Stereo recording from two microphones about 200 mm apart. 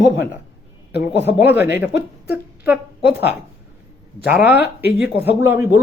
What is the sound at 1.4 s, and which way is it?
Speech, 10° right (ahead or behind).